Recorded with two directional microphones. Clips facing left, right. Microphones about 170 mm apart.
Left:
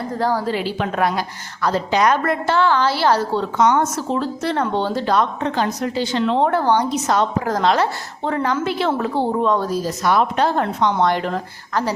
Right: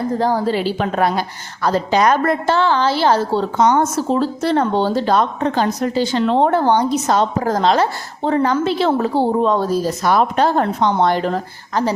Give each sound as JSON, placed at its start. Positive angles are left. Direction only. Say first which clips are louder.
{"t": 0.2, "sound": "a woman's voice", "louder": "even", "side_deg": -20}
{"t": 6.5, "sound": "a woman's voice", "louder": "right 3 dB", "side_deg": -25}
{"t": 11.7, "sound": "a woman's voice", "louder": "right 3 dB", "side_deg": -20}